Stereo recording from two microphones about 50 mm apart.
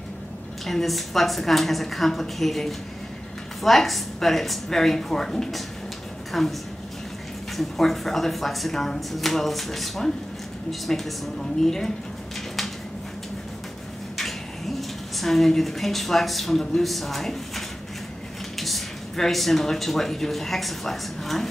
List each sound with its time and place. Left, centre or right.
0.7 s speech: centre
7.5 s a woman's voice: centre
14.1 s speech: centre